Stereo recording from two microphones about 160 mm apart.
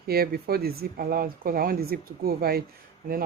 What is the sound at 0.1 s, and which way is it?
Speech, 75° right (ahead or behind).